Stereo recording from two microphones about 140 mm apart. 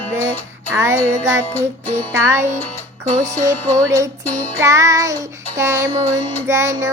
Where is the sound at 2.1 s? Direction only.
20° right (ahead or behind).